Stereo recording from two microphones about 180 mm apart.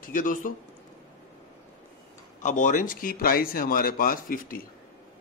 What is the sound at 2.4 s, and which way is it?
Speech, 45° left (ahead or behind).